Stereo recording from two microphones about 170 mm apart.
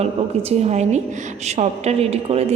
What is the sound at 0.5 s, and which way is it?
A woman's voice, 40° right (ahead or behind).